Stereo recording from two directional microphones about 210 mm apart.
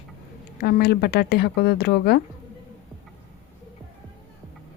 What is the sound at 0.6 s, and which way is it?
Speech, 45° left (ahead or behind).